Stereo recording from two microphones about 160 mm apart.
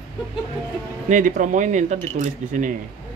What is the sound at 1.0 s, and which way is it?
Speech, 50° right (ahead or behind).